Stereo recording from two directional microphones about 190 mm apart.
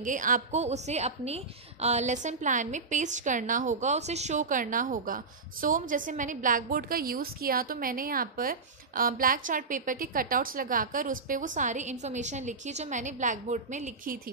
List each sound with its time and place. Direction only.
0.0 s a woman's voice: 45° right (ahead or behind)